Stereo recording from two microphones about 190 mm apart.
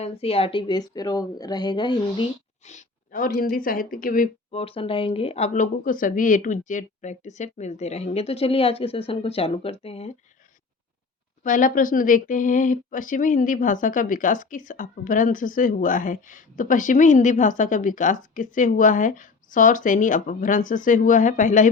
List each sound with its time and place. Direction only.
0.0 s a woman's voice: 30° left (ahead or behind)
2.6 s speech: 40° left (ahead or behind)
4.5 s speech: 30° left (ahead or behind)
11.4 s speech: 45° left (ahead or behind)